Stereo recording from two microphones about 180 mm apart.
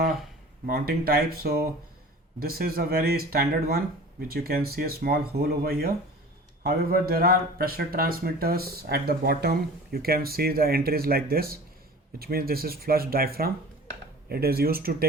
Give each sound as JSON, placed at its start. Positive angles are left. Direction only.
{"t": 0.7, "sound": "speech", "side_deg": -60}